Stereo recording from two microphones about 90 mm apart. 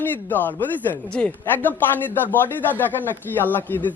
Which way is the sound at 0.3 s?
20° left (ahead or behind).